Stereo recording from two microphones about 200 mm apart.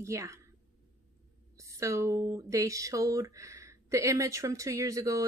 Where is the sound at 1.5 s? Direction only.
15° right (ahead or behind).